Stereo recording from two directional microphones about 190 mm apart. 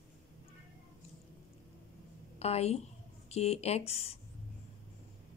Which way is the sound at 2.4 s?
35° left (ahead or behind).